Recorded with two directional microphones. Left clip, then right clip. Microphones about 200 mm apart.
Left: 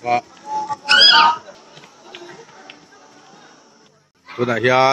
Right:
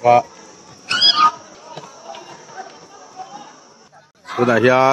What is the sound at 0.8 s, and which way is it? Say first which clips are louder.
Goose: left 3 dB; 50° left (ahead or behind).